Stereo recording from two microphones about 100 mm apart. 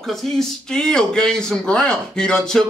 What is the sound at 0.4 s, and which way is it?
Speech, 5° left (ahead or behind).